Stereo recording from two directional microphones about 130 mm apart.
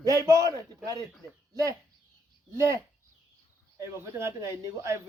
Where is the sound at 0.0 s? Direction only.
25° right (ahead or behind).